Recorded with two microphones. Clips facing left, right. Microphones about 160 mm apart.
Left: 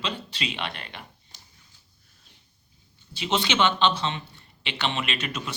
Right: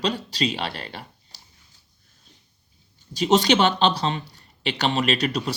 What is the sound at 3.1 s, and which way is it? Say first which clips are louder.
Speech: right 8 dB; 40° right (ahead or behind).